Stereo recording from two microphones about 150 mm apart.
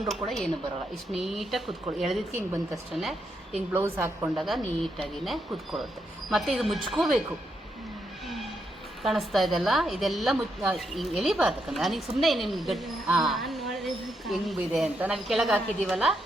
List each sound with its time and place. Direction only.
0.1 s a woman's voice: centre (ahead or behind)
3.7 s a woman's voice: 15° right (ahead or behind)
4.4 s a woman's voice: centre (ahead or behind)
9.0 s a woman's voice: centre (ahead or behind)